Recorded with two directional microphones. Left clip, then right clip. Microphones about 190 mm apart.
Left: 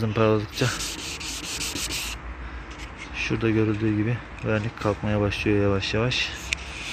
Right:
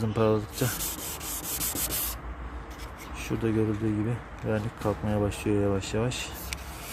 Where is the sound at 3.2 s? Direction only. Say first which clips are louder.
Left 6 dB; 5° left (ahead or behind).